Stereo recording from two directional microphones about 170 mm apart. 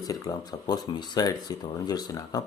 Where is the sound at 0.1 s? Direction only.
20° left (ahead or behind).